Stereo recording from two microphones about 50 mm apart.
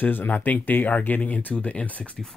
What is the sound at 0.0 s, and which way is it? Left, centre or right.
Speech, left.